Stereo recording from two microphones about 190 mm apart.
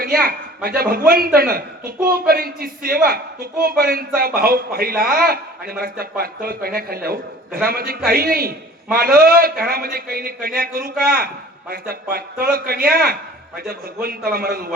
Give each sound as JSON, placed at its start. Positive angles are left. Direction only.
{"t": 0.0, "sound": "a man's voice", "side_deg": -50}